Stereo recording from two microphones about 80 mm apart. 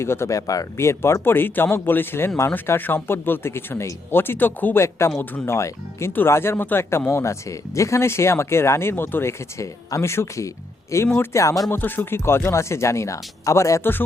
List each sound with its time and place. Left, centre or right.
0.0 s speech: left
11.7 s speech: left